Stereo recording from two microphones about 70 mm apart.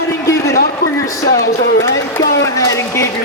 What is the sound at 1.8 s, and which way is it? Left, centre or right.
Speech, left.